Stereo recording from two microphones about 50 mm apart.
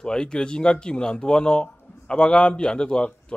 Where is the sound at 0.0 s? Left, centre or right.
Centre.